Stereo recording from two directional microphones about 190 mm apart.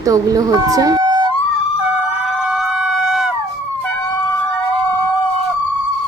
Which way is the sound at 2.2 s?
Centre (ahead or behind).